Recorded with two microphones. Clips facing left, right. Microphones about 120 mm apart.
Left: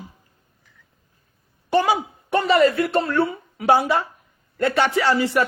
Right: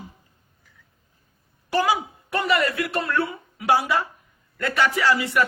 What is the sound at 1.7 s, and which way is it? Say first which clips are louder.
Speech: left 3 dB; 25° left (ahead or behind).